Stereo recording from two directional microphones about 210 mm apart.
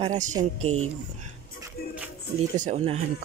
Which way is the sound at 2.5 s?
35° right (ahead or behind).